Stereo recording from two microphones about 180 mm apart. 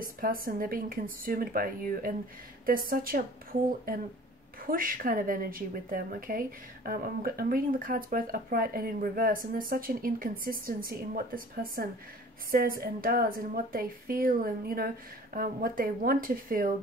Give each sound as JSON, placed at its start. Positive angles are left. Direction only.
{"t": 0.0, "sound": "a woman's voice", "side_deg": -50}